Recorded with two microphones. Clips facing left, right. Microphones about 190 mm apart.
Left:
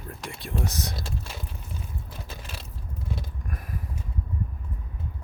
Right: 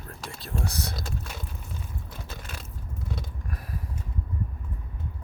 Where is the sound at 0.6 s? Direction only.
40° left (ahead or behind).